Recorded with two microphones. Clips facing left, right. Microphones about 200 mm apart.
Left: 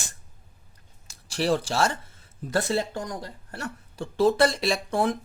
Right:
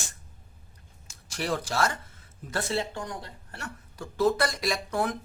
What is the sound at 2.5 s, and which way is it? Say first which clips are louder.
A woman's voice: left 4 dB; 40° left (ahead or behind).